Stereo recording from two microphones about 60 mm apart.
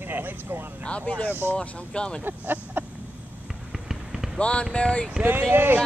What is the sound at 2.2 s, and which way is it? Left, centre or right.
Speech, right.